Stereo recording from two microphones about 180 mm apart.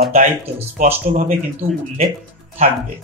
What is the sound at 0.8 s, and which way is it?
Speech, 50° right (ahead or behind).